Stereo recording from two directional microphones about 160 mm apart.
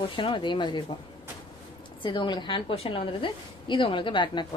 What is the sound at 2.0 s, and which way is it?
Speech, 30° left (ahead or behind).